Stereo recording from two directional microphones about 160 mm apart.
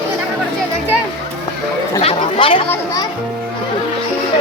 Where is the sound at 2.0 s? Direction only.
35° left (ahead or behind).